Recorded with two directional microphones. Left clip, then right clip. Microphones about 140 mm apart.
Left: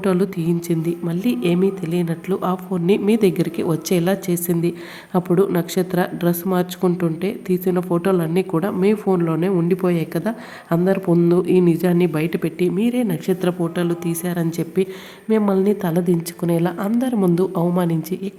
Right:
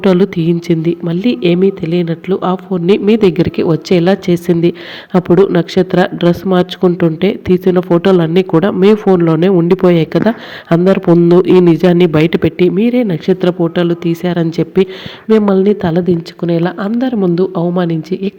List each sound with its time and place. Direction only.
0.0 s speech: 30° right (ahead or behind)